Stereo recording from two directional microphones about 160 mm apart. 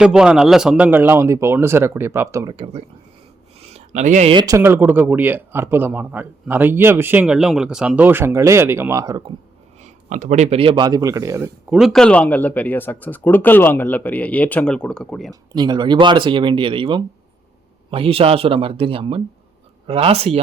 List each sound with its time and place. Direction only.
0.0 s speech: 5° right (ahead or behind)
3.6 s a sound: 45° right (ahead or behind)
4.3 s speech: 30° right (ahead or behind)
4.5 s speech: 15° right (ahead or behind)
9.8 s speech: 50° right (ahead or behind); by 11.5 s 20° right (ahead or behind)
11.7 s speech: centre (ahead or behind)
15.3 s speech: 25° right (ahead or behind)